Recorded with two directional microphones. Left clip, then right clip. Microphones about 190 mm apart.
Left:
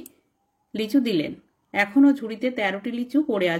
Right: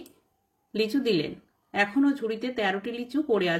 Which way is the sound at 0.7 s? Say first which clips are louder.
Left 2 dB; 30° left (ahead or behind).